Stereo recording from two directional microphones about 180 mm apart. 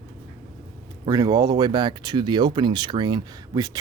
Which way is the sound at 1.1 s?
20° right (ahead or behind).